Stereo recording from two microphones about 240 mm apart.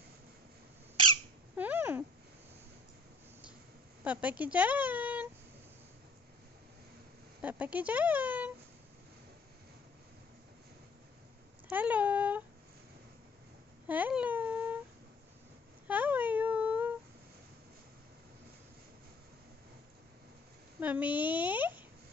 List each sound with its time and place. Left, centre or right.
1.6 s a sound: centre
4.0 s speech: centre
7.4 s speech: centre
11.7 s a sound: centre
13.8 s speech: centre
15.9 s whimper: centre
20.8 s speech: centre